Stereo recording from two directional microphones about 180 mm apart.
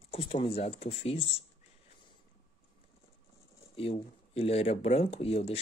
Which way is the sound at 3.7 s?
35° left (ahead or behind).